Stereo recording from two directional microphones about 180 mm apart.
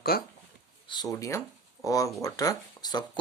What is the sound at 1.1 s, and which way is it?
Speech, 15° left (ahead or behind).